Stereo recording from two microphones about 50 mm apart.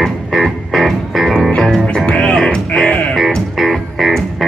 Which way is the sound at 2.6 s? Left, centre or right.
Left.